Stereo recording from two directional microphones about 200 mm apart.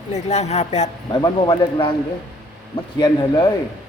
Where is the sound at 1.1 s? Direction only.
20° left (ahead or behind).